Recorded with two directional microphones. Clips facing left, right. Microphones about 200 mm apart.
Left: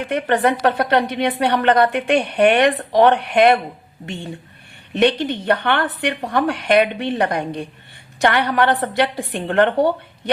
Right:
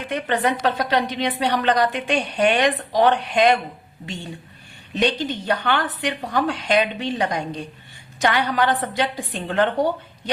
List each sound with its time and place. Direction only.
0.0 s a woman's voice: 55° left (ahead or behind)